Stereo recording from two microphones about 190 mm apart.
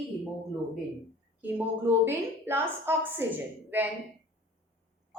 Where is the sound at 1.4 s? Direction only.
10° right (ahead or behind).